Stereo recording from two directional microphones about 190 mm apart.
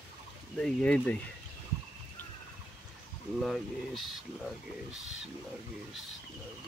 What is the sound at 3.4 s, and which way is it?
Speech, centre (ahead or behind).